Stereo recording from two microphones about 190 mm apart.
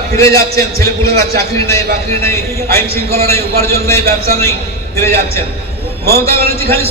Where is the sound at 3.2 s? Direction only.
15° left (ahead or behind).